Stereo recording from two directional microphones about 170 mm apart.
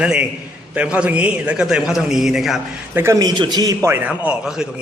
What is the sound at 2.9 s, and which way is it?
A man's voice, 15° right (ahead or behind).